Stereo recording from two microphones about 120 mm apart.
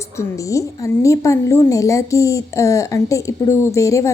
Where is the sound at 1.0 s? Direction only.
25° left (ahead or behind).